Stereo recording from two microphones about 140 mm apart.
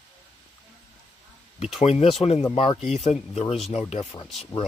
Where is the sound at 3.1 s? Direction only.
45° left (ahead or behind).